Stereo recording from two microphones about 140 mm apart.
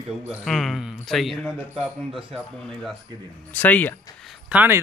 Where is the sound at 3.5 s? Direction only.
10° left (ahead or behind).